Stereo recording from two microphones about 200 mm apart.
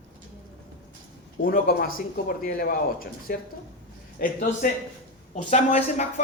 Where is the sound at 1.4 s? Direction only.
45° left (ahead or behind).